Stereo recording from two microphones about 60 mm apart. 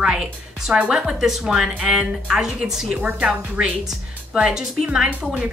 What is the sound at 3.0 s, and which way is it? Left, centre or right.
A woman's voice, right.